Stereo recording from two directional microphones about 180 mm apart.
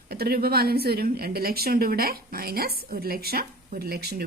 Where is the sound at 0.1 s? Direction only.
60° right (ahead or behind).